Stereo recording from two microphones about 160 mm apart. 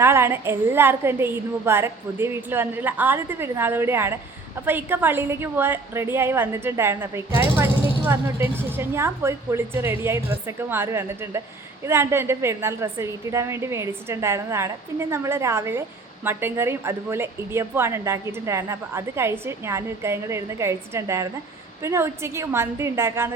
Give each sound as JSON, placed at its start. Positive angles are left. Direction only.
{"t": 0.0, "sound": "a woman's voice", "side_deg": -15}